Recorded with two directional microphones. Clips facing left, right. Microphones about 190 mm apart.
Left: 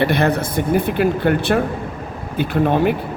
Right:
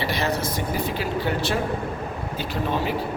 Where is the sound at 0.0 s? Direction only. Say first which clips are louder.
Left 8 dB; 55° left (ahead or behind).